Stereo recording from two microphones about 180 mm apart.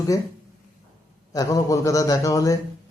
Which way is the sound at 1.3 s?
20° left (ahead or behind).